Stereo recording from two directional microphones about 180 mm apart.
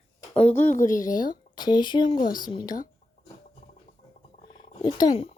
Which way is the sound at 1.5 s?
25° left (ahead or behind).